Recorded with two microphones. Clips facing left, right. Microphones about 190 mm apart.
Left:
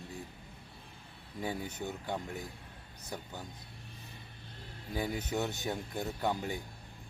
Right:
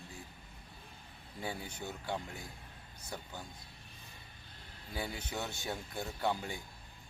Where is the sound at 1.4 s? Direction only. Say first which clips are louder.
Left 4 dB; 20° left (ahead or behind).